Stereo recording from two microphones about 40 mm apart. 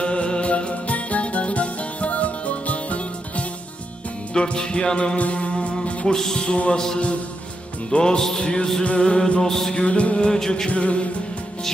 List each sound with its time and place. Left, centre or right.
0.0 s music: left
4.4 s music: left
5.1 s music: left
6.1 s music: centre
6.4 s music: left
7.9 s music: left
8.8 s music: left
9.4 s music: centre
9.7 s music: left
10.2 s music: centre
10.7 s music: left